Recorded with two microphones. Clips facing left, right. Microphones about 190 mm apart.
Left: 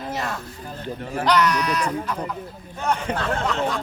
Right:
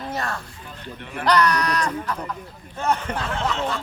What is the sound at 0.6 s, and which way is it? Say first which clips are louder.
Speech: left 6 dB; 40° left (ahead or behind).